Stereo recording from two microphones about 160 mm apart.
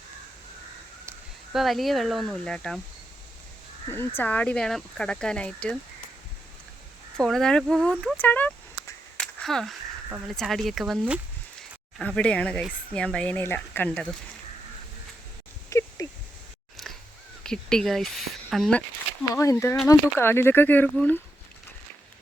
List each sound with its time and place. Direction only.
1.5 s speech: centre (ahead or behind)
3.8 s speech: 15° left (ahead or behind)
7.2 s speech: 5° left (ahead or behind)
9.1 s a sound: 5° left (ahead or behind)
10.2 s speech: centre (ahead or behind)
15.7 s dog: 15° left (ahead or behind)
16.7 s a sound: centre (ahead or behind)
17.4 s speech: 5° left (ahead or behind)
19.3 s speech: 20° left (ahead or behind)